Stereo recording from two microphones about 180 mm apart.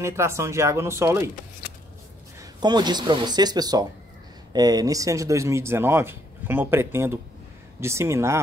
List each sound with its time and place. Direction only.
0.0 s speech: 15° right (ahead or behind)
2.6 s speech: 25° right (ahead or behind)